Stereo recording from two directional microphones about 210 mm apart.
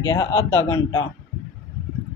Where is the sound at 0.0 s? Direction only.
15° left (ahead or behind).